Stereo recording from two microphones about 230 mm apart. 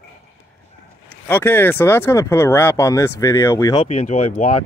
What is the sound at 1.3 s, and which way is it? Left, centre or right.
Speech, centre.